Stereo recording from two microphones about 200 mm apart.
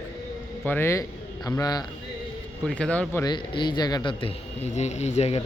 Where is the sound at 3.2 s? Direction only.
20° left (ahead or behind).